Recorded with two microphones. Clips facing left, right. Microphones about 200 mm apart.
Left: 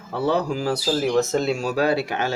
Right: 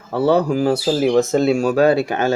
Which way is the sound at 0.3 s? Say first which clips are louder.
Right 6 dB; 55° right (ahead or behind).